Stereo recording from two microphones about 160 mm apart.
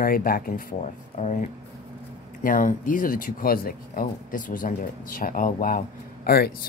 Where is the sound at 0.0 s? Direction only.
65° left (ahead or behind).